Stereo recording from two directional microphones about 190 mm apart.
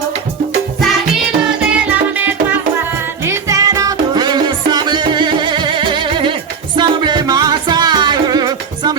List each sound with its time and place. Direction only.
1.7 s music: 10° right (ahead or behind)